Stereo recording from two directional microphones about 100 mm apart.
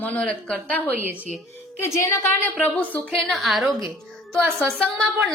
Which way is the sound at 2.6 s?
15° left (ahead or behind).